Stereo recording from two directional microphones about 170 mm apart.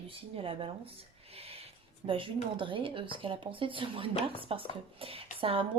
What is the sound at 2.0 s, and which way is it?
A woman's voice, 30° right (ahead or behind).